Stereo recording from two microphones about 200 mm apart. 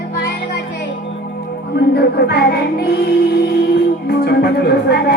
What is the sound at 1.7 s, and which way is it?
Music, 55° left (ahead or behind).